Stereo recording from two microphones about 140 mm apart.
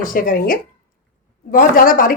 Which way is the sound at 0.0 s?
80° left.